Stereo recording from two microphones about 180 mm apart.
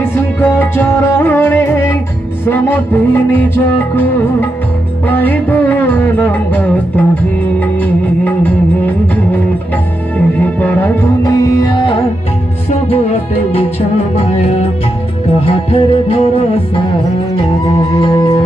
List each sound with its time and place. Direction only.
0.0 s music: 10° left (ahead or behind)
13.7 s music: 35° left (ahead or behind)